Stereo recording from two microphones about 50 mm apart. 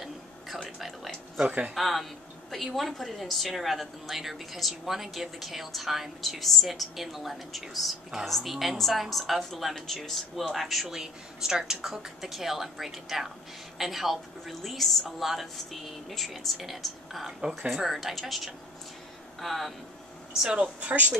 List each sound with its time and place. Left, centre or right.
0.7 s a sound: centre
1.8 s a woman's voice: centre
17.4 s a woman's voice: centre
20.4 s speech: right